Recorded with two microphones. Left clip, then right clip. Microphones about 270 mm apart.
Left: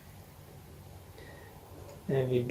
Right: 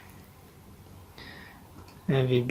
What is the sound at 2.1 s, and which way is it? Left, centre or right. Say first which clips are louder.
Speech: right 4 dB; right.